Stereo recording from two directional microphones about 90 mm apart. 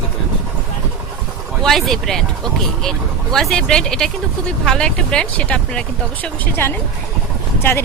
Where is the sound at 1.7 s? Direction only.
5° left (ahead or behind).